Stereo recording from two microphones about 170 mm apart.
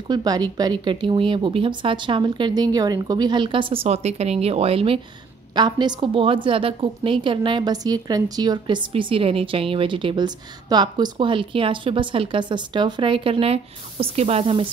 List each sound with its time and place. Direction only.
0.1 s a woman's voice: 25° right (ahead or behind)